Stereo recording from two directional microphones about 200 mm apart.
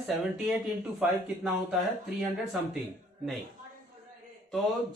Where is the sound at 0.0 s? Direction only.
5° right (ahead or behind).